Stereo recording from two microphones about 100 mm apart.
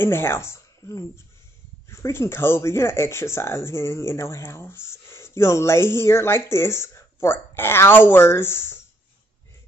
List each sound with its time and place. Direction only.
0.0 s speech: 25° left (ahead or behind)